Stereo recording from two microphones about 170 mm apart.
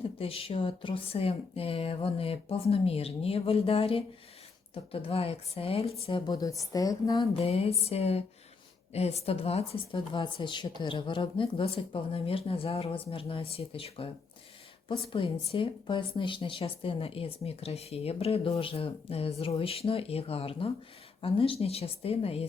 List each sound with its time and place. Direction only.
0.2 s a woman's voice: 35° left (ahead or behind)
7.3 s speech: 35° left (ahead or behind)